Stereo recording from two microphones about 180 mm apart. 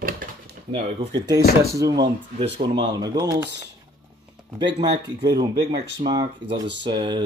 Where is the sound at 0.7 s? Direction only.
25° right (ahead or behind).